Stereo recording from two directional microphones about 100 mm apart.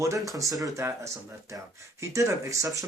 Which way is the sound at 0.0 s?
30° right (ahead or behind).